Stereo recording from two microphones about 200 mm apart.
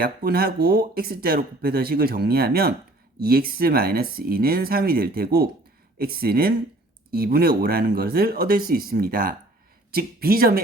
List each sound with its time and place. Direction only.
0.0 s speech: 50° right (ahead or behind)